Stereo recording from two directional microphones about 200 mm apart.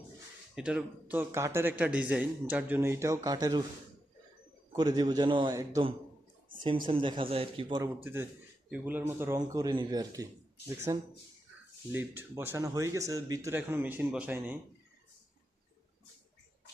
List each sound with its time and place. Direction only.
0.5 s a man's voice: 5° right (ahead or behind); by 3.6 s 20° right (ahead or behind)
4.7 s a man's voice: 20° right (ahead or behind)
8.0 s a man's voice: 10° right (ahead or behind)